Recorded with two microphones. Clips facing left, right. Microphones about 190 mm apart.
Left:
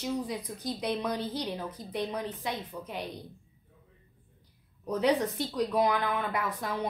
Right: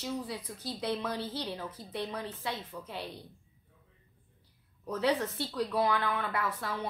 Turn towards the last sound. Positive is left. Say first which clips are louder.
# left 2 dB
turn(degrees=15)  # may be behind; listen again after turning